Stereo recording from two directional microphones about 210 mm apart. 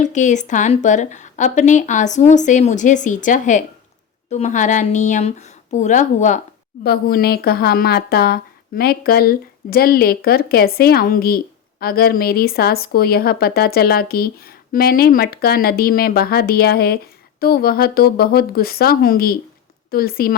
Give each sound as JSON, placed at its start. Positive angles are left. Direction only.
{"t": 0.0, "sound": "a woman's voice", "side_deg": 35}
{"t": 6.8, "sound": "a woman's voice", "side_deg": 45}